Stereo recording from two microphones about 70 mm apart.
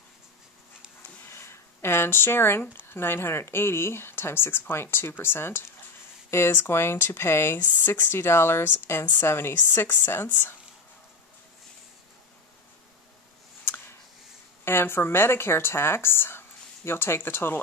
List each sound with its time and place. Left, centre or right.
1.3 s a sound: left
2.9 s speech: left
14.6 s speech: left